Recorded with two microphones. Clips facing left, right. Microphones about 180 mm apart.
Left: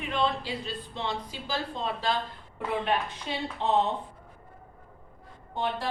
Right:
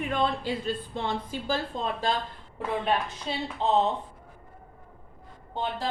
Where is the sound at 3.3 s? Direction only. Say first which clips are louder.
Right 2 dB; 30° right (ahead or behind).